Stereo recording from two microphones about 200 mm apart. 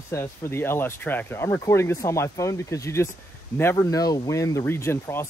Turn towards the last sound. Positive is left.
turn(degrees=10)  # may be behind; listen again after turning